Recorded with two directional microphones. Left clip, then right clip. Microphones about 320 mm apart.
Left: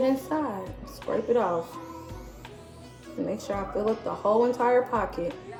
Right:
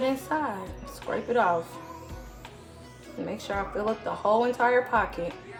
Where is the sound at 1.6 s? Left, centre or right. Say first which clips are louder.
Left 1 dB; centre.